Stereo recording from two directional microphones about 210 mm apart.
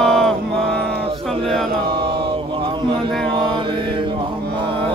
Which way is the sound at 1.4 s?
Centre (ahead or behind).